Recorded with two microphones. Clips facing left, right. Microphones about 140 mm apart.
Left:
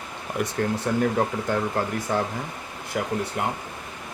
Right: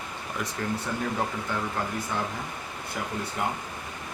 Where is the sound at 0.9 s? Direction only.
65° left (ahead or behind).